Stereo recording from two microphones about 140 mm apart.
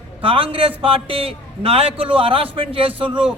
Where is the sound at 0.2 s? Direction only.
40° right (ahead or behind).